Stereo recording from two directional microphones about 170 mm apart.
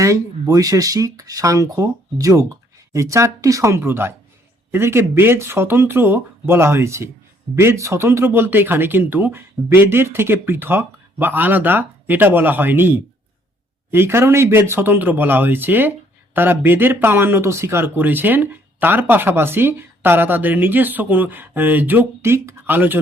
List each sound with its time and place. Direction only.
0.0 s speech: 20° right (ahead or behind)
13.9 s speech: 15° right (ahead or behind)